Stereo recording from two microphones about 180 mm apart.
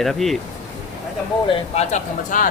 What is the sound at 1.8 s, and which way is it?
Speech, 40° left (ahead or behind).